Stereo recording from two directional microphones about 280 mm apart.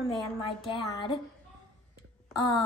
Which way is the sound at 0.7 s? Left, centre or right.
Centre.